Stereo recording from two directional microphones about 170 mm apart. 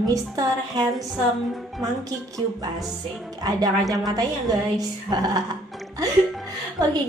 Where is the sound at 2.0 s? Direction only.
20° right (ahead or behind).